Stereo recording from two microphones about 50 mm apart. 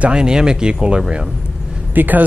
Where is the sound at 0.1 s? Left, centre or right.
Centre.